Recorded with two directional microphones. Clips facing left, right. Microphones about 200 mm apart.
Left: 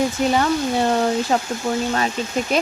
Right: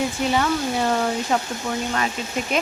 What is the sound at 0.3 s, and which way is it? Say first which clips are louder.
Speech: left 3 dB; 35° left (ahead or behind).